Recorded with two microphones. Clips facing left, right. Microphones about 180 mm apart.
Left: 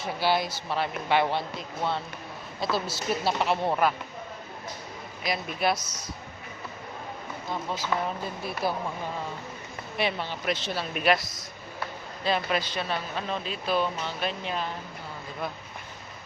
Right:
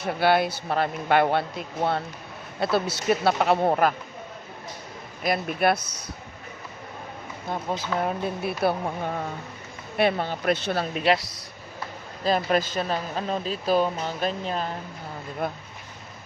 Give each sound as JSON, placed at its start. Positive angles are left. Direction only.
{"t": 0.0, "sound": "a man's voice", "side_deg": -60}
{"t": 5.2, "sound": "a man's voice", "side_deg": -55}
{"t": 7.7, "sound": "speech", "side_deg": -50}
{"t": 8.0, "sound": "a man's voice", "side_deg": -65}
{"t": 10.0, "sound": "speech", "side_deg": -50}
{"t": 10.9, "sound": "speech", "side_deg": -30}
{"t": 12.2, "sound": "speech", "side_deg": -45}
{"t": 15.4, "sound": "speech", "side_deg": -50}